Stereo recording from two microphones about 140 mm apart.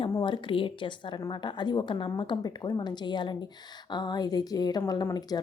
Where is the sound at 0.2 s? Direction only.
40° left (ahead or behind).